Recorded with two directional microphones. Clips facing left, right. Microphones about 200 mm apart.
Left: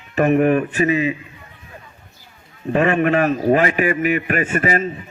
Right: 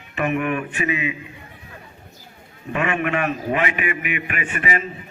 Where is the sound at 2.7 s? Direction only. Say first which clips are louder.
Left 6 dB; 35° left (ahead or behind).